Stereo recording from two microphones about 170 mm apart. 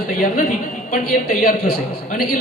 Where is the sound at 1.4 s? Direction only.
60° left (ahead or behind).